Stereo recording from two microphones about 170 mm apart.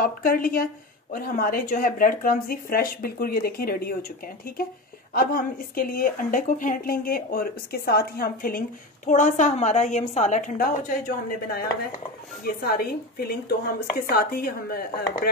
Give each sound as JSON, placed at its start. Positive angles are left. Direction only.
{"t": 0.0, "sound": "speech", "side_deg": 55}
{"t": 5.1, "sound": "speech", "side_deg": 60}